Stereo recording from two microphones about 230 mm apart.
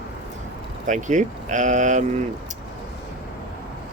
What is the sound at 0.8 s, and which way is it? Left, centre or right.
Speech, right.